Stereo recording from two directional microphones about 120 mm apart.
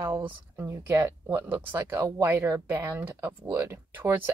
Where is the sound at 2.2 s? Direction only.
20° right (ahead or behind).